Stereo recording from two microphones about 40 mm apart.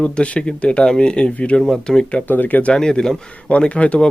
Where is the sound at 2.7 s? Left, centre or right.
Centre.